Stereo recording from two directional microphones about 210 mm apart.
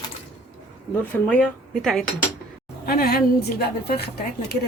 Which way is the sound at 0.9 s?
5° left (ahead or behind).